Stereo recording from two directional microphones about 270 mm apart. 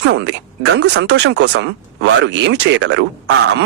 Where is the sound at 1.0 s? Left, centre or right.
Right.